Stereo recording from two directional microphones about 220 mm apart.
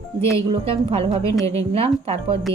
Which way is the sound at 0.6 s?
25° right (ahead or behind).